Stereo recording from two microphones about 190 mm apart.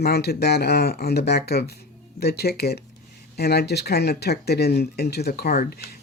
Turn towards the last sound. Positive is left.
turn(degrees=55)  # may be behind; listen again after turning